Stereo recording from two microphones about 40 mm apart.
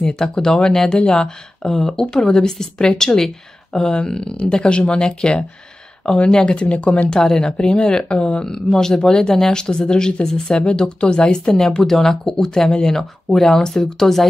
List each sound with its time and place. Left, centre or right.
0.0 s speech: centre
1.6 s speech: centre